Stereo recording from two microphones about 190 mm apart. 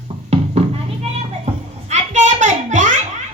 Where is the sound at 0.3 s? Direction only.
30° right (ahead or behind).